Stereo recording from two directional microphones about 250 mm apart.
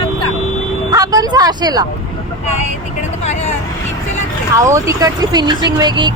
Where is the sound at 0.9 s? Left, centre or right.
Centre.